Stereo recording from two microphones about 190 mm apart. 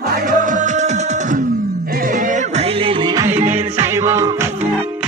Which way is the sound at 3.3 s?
35° right (ahead or behind).